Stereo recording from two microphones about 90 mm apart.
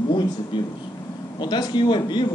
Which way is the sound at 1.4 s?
55° left (ahead or behind).